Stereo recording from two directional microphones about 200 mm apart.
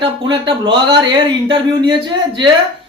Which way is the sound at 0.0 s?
25° right (ahead or behind).